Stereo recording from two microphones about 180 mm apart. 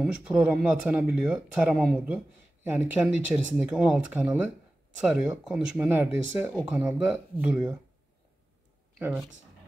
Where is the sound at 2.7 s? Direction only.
10° right (ahead or behind).